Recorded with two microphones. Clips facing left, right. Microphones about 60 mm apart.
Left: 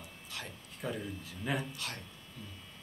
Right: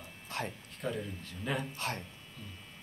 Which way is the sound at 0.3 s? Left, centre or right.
Right.